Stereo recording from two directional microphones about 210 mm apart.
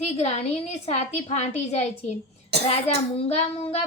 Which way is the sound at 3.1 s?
30° left (ahead or behind).